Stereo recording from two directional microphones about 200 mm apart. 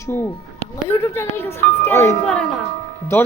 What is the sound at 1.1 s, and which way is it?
Speech, 10° left (ahead or behind).